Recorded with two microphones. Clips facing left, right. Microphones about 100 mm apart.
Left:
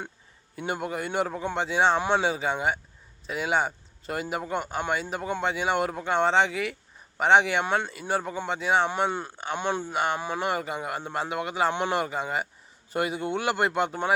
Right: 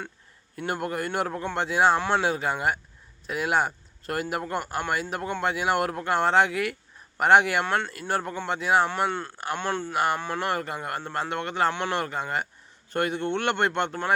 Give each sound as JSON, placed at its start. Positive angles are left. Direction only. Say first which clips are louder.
{"t": 0.5, "sound": "speech", "louder": "right 1 dB", "side_deg": 0}
{"t": 2.0, "sound": "speech", "louder": "even", "side_deg": 15}
{"t": 2.2, "sound": "speech", "louder": "even", "side_deg": 0}
{"t": 7.6, "sound": "speech", "louder": "even", "side_deg": 10}
{"t": 7.9, "sound": "speech", "louder": "even", "side_deg": 0}
{"t": 9.0, "sound": "speech", "louder": "right 1 dB", "side_deg": 15}
{"t": 9.9, "sound": "speech", "louder": "right 4 dB", "side_deg": 0}
{"t": 10.2, "sound": "speech", "louder": "even", "side_deg": 10}
{"t": 11.7, "sound": "speech", "louder": "left 2 dB", "side_deg": 15}
{"t": 11.9, "sound": "speech", "louder": "left 1 dB", "side_deg": 5}